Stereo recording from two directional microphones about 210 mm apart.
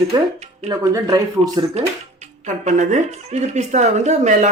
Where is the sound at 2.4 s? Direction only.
35° right (ahead or behind).